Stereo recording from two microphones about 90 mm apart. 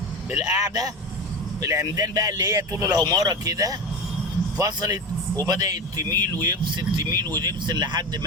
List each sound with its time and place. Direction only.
0.3 s speech: 45° right (ahead or behind)